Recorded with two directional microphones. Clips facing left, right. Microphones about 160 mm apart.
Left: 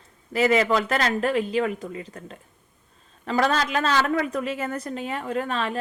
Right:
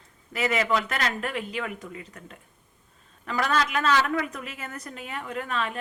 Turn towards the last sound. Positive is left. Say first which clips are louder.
# left 4 dB
turn(degrees=30)  # may be behind; listen again after turning